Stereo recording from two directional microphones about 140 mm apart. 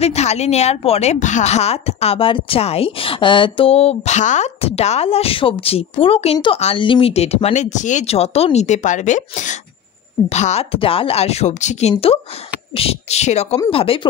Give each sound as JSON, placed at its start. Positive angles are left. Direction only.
{"t": 0.0, "sound": "a woman's voice", "side_deg": 50}
{"t": 11.9, "sound": "a woman's voice", "side_deg": 45}
{"t": 13.7, "sound": "speech", "side_deg": 40}